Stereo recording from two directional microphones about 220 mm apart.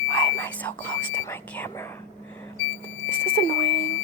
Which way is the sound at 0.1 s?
10° left (ahead or behind).